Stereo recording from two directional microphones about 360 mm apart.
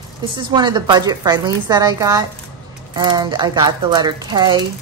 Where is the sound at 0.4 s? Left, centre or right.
Centre.